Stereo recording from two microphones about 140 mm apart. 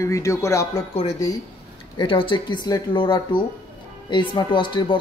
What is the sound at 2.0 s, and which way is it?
Speech, 40° left (ahead or behind).